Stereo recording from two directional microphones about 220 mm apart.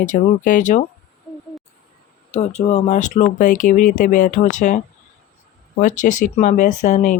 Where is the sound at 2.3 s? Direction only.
30° left (ahead or behind).